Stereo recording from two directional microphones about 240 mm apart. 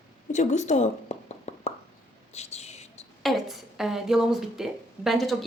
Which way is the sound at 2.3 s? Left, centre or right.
Left.